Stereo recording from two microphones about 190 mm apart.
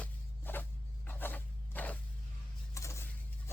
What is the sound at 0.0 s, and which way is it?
Walk, 10° left (ahead or behind).